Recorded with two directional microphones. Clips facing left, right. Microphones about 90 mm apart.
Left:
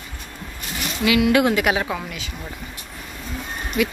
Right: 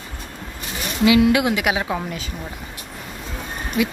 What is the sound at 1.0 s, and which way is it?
Speech, 25° right (ahead or behind).